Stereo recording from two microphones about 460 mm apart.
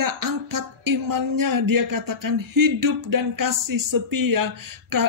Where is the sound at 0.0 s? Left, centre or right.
Right.